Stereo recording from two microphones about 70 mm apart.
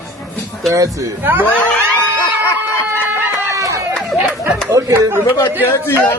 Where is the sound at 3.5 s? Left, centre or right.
Right.